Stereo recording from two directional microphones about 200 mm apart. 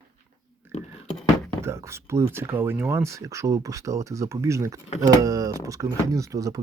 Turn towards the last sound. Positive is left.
turn(degrees=-15)  # may be behind; listen again after turning